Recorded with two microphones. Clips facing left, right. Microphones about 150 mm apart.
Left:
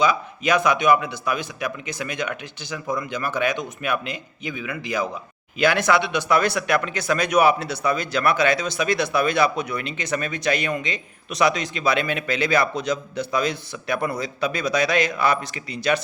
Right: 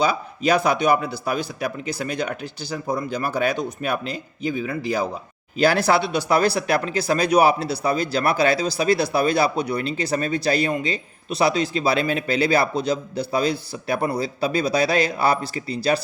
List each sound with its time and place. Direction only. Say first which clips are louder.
0.0 s speech: even; 35° right (ahead or behind)